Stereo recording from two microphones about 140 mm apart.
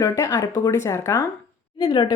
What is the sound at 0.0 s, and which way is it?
Speech, 20° left (ahead or behind).